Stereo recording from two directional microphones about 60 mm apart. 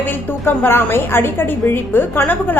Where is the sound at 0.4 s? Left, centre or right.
Left.